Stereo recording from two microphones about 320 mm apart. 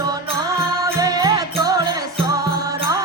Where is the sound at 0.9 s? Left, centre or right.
Centre.